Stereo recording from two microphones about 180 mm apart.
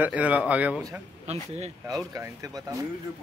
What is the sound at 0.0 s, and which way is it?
Speech, 10° right (ahead or behind).